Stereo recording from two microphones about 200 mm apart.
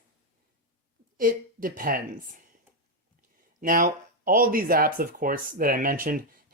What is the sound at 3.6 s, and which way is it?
Speech, 40° right (ahead or behind).